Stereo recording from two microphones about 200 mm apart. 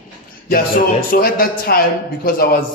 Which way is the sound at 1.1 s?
45° left (ahead or behind).